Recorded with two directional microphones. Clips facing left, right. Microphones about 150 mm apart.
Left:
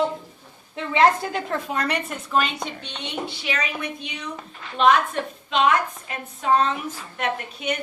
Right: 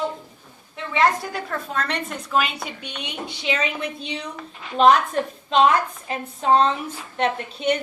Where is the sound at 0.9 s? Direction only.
25° left (ahead or behind).